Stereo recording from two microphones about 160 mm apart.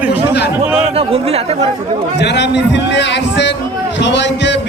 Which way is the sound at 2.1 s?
90° left.